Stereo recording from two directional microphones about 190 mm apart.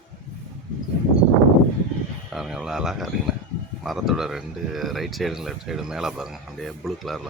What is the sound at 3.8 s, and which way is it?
Speech, centre (ahead or behind).